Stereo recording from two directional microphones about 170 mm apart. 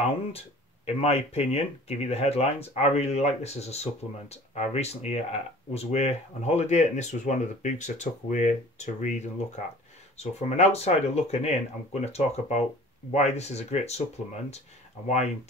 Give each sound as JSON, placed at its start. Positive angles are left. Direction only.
{"t": 0.8, "sound": "speech", "side_deg": 35}